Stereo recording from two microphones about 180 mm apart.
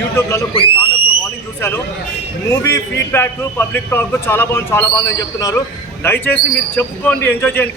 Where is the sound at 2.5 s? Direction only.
15° left (ahead or behind).